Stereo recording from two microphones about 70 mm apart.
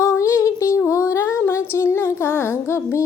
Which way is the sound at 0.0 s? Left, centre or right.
Left.